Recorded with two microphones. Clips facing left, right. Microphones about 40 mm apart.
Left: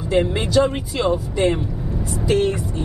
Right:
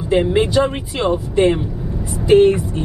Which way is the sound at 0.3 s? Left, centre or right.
Centre.